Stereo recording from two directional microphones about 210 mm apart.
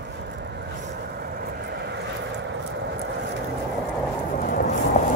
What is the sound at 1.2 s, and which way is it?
Vehicle, 50° right (ahead or behind).